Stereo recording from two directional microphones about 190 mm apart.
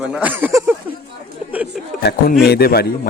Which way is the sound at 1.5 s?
10° right (ahead or behind).